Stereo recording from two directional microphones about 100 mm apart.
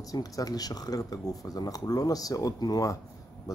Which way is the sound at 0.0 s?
35° left (ahead or behind).